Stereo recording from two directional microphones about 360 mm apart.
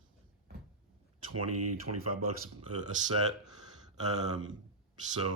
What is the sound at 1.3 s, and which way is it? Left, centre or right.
Speech, right.